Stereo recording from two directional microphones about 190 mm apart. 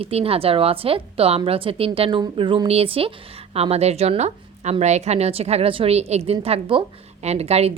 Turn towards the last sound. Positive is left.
turn(degrees=-35)  # may be behind; listen again after turning